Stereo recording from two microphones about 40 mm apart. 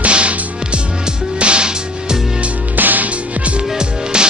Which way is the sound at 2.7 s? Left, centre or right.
Right.